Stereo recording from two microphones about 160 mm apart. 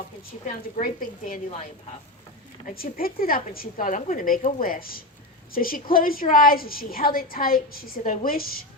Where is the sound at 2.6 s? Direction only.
65° left (ahead or behind).